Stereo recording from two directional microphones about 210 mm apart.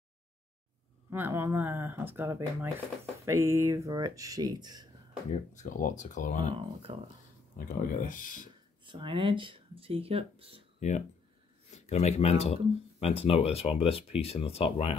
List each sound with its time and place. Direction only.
1.1 s speech: 10° right (ahead or behind)
5.3 s speech: 35° left (ahead or behind)
6.5 s speech: 25° right (ahead or behind)
7.5 s speech: 40° left (ahead or behind)
8.8 s speech: 25° right (ahead or behind)
10.8 s speech: 35° left (ahead or behind)